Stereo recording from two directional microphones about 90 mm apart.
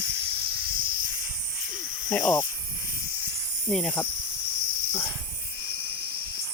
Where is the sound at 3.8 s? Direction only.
20° left (ahead or behind).